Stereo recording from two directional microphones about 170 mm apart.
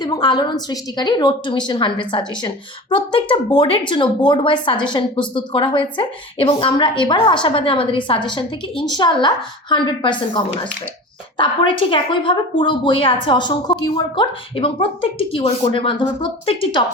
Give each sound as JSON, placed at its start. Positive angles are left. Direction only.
{"t": 0.0, "sound": "speech", "side_deg": 25}